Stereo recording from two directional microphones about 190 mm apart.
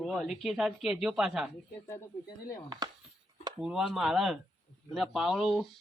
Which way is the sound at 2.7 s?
20° right (ahead or behind).